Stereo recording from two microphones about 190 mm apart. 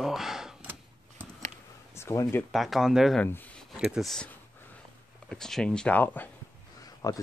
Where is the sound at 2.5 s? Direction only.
Centre (ahead or behind).